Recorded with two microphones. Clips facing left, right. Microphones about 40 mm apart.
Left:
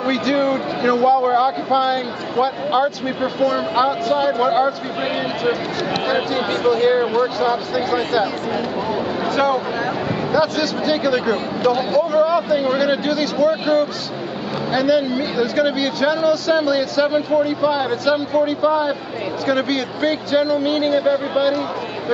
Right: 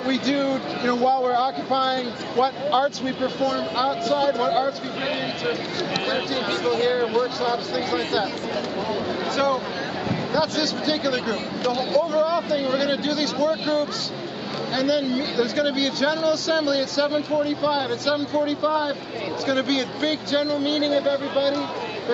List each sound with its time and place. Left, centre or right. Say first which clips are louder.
0.0 s speech: left 4 dB; centre
4.4 s speech: left 5 dB; centre
6.0 s speech: left 6 dB; centre
9.3 s speech: left 4 dB; centre